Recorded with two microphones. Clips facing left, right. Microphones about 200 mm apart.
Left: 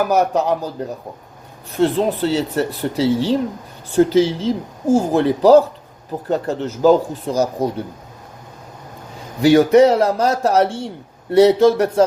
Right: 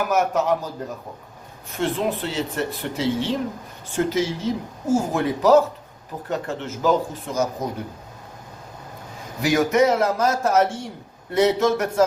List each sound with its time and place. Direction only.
0.1 s speech: 35° left (ahead or behind)
1.7 s speech: 35° left (ahead or behind)
9.4 s speech: 30° left (ahead or behind)